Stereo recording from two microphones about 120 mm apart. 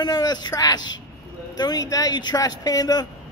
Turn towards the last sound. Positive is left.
turn(degrees=30)  # may be behind; listen again after turning